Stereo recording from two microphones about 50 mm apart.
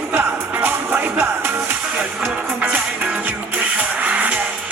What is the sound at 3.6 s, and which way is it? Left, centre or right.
Music, right.